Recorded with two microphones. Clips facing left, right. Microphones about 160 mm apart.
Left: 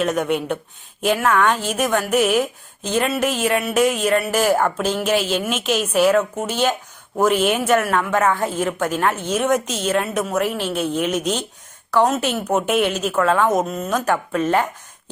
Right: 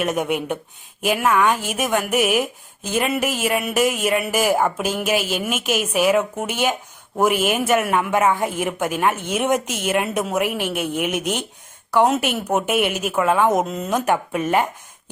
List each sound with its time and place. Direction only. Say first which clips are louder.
0.0 s a woman's voice: left 2 dB; 10° right (ahead or behind)
7.8 s a woman's voice: even; 15° right (ahead or behind)